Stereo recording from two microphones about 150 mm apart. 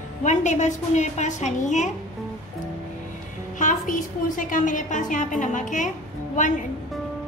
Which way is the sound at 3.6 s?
60° left (ahead or behind).